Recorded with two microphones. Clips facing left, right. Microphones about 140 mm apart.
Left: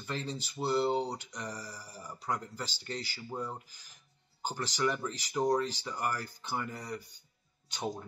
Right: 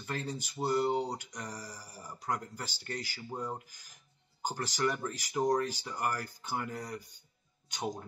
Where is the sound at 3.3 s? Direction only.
20° right (ahead or behind).